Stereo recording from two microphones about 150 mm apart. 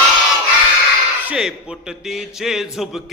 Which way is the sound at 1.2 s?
5° right (ahead or behind).